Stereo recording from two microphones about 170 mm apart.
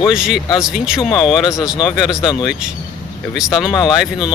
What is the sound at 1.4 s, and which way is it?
Speech, 20° left (ahead or behind).